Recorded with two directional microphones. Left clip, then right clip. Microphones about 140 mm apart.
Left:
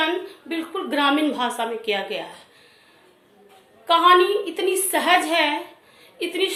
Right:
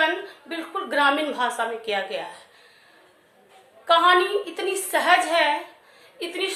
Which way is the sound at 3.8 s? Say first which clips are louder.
Left 2 dB; 15° left (ahead or behind).